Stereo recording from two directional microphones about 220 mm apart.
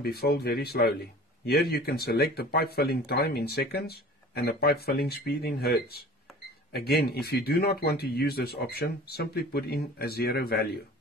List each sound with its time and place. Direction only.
0.0 s speech: 45° left (ahead or behind)